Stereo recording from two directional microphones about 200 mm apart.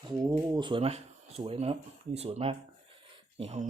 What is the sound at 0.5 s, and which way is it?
Speech, 25° right (ahead or behind).